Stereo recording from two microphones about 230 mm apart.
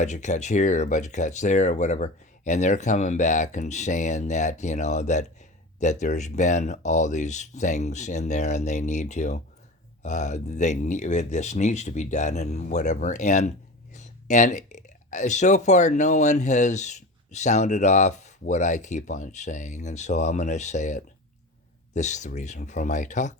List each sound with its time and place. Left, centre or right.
0.0 s speech: left